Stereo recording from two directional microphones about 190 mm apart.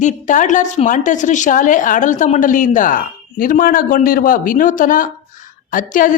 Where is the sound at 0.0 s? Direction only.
40° left (ahead or behind).